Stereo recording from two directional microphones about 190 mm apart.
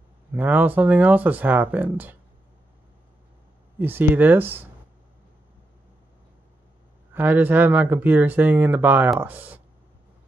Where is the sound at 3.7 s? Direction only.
10° right (ahead or behind).